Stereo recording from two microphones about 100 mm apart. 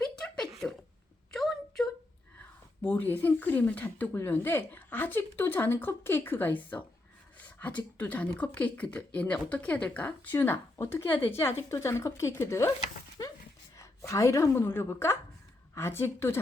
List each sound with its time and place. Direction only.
0.0 s a sound: 5° left (ahead or behind)
2.8 s a woman's voice: 20° left (ahead or behind)
13.7 s a woman's voice: 30° left (ahead or behind)